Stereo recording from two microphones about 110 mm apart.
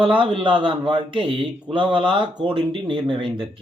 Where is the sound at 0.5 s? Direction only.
45° right (ahead or behind).